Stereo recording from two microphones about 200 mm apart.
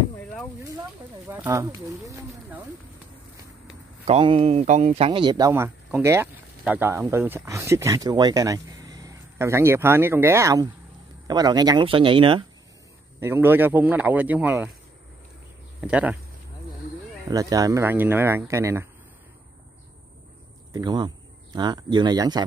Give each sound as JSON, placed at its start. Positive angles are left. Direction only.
{"t": 0.2, "sound": "a sound", "side_deg": 5}
{"t": 1.2, "sound": "speech", "side_deg": -10}
{"t": 3.6, "sound": "speech", "side_deg": -30}
{"t": 5.5, "sound": "speech", "side_deg": -10}
{"t": 13.2, "sound": "speech", "side_deg": -10}
{"t": 15.8, "sound": "speech", "side_deg": -5}
{"t": 17.3, "sound": "speech", "side_deg": -15}
{"t": 20.7, "sound": "speech", "side_deg": -20}